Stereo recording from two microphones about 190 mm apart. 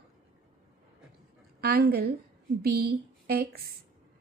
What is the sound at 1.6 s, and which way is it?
Speech, 55° right (ahead or behind).